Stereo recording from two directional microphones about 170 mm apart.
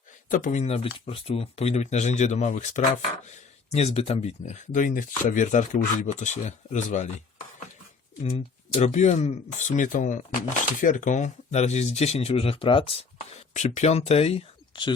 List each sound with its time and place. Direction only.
0.3 s speech: 50° left (ahead or behind)
8.2 s speech: 40° left (ahead or behind)
13.5 s speech: 45° left (ahead or behind)